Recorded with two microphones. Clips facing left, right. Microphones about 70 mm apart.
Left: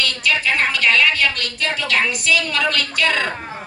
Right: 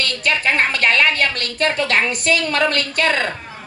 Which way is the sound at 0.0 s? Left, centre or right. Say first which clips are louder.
Right 1 dB; right.